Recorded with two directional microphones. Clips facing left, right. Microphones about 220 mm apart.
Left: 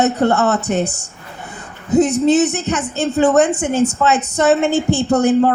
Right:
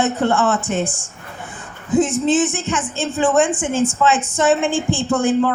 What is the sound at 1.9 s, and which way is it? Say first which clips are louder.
A woman's voice: left 3 dB; 40° left (ahead or behind).